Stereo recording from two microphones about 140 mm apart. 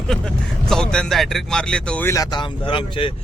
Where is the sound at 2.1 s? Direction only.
30° left (ahead or behind).